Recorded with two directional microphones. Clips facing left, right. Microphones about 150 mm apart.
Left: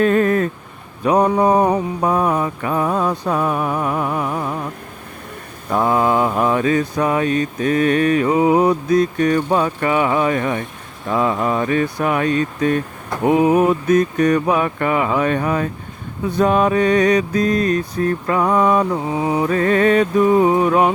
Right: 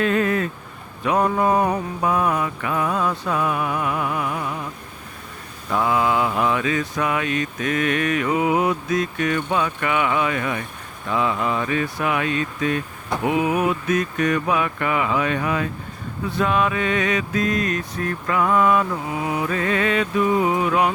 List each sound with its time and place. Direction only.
0.0 s a sound: 40° left (ahead or behind)
1.0 s mantra: 35° left (ahead or behind)
5.7 s mantra: 40° left (ahead or behind)